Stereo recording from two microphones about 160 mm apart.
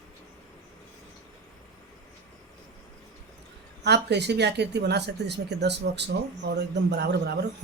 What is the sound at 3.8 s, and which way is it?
Speech, 90° right.